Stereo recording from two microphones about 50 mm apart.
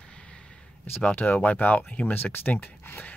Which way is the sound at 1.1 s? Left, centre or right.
Left.